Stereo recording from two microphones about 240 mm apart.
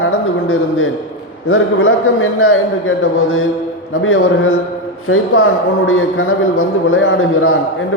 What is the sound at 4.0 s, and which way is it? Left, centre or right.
Speech, left.